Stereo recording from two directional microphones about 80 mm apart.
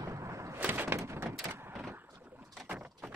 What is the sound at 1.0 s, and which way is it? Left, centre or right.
Door, right.